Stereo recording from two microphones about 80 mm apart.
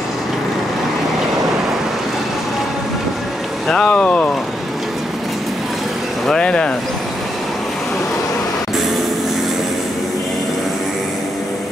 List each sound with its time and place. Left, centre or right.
3.6 s speech: centre
6.2 s speech: centre